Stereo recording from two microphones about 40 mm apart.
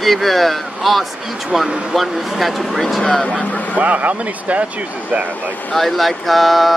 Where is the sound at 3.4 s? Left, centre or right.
Left.